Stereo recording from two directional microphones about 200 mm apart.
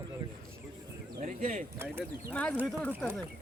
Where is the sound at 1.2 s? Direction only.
35° right (ahead or behind).